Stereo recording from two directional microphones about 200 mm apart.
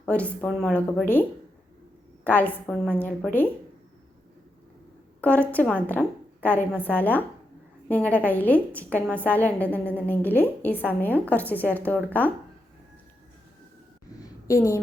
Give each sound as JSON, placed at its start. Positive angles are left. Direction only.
{"t": 0.0, "sound": "a woman's voice", "side_deg": 5}
{"t": 5.2, "sound": "a woman's voice", "side_deg": 10}
{"t": 14.2, "sound": "a sound", "side_deg": 15}